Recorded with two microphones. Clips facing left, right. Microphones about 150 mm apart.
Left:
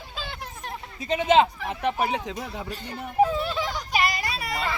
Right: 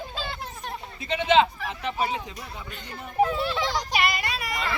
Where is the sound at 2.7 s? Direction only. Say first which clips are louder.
Left 4 dB; 40° left (ahead or behind).